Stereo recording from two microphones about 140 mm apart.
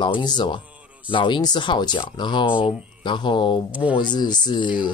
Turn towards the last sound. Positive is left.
turn(degrees=35)  # may be behind; listen again after turning